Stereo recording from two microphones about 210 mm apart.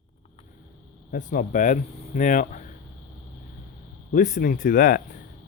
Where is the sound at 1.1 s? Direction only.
40° left (ahead or behind).